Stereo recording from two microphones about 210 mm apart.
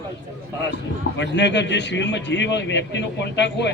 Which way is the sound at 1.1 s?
55° left (ahead or behind).